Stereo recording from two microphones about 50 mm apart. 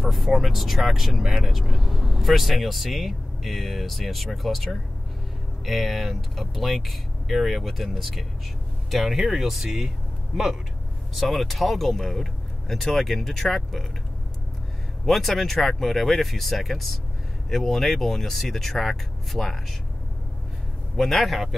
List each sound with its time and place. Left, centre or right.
0.0 s speech: centre
15.0 s speech: centre
20.9 s speech: centre